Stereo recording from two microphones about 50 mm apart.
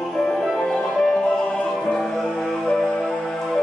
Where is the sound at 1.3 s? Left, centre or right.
Centre.